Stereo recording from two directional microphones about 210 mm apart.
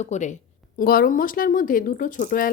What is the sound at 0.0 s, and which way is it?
Speech, 35° left (ahead or behind).